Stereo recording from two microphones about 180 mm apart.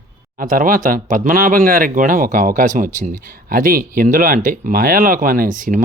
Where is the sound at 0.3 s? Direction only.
50° right (ahead or behind).